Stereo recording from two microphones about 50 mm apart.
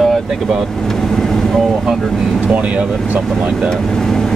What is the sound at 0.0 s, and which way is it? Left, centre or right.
Vehicle, centre.